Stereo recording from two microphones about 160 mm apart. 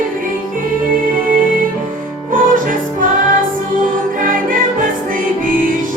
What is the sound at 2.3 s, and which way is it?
Music, 60° right (ahead or behind).